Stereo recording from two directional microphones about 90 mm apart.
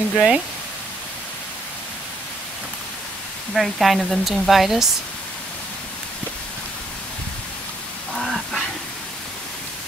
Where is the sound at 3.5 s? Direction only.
Centre (ahead or behind).